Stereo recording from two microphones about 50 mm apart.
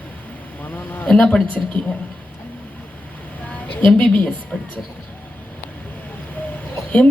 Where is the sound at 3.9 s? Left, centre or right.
Left.